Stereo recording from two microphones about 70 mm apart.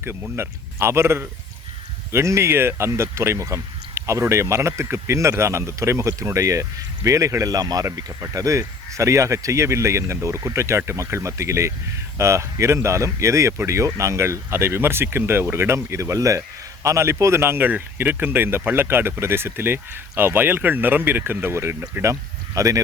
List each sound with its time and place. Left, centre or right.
0.3 s speech: right
8.2 s speech: right
22.0 s speech: right